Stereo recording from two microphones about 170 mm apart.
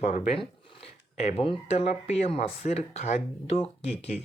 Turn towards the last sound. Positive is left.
turn(degrees=45)  # may be behind; listen again after turning